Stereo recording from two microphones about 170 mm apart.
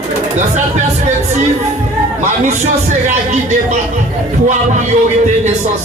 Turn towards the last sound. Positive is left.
turn(degrees=-45)  # may be behind; listen again after turning